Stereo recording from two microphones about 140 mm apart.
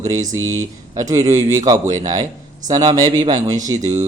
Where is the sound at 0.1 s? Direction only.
25° right (ahead or behind).